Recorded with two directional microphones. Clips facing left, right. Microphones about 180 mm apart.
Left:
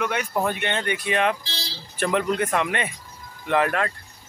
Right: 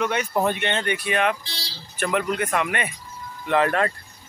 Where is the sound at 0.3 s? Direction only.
20° right (ahead or behind).